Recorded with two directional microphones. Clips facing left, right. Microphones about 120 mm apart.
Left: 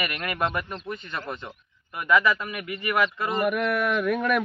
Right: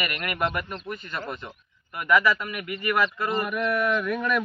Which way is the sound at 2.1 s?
15° left (ahead or behind).